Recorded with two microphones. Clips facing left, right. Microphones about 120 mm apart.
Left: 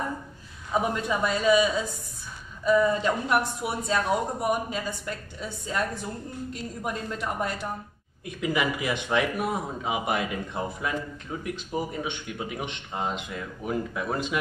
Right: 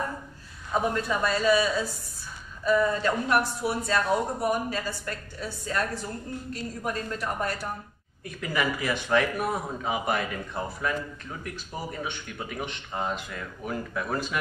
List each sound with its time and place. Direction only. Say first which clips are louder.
0.7 s speech: even; 15° left (ahead or behind)